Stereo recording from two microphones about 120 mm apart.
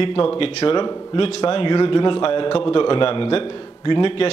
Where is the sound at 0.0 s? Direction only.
45° left (ahead or behind).